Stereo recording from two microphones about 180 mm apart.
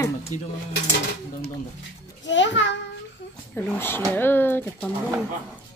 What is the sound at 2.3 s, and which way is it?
Speech, 85° left.